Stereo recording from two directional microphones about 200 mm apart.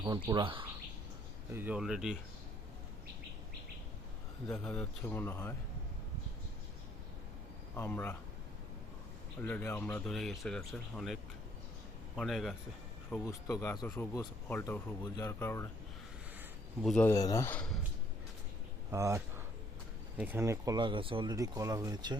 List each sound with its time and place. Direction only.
0.3 s speech: 25° right (ahead or behind)
1.5 s speech: 5° right (ahead or behind)
4.4 s speech: 5° left (ahead or behind)
7.8 s speech: 10° left (ahead or behind)
9.4 s speech: 10° left (ahead or behind)
16.8 s speech: 5° left (ahead or behind)
17.1 s speech: 15° left (ahead or behind)
18.9 s speech: 15° right (ahead or behind)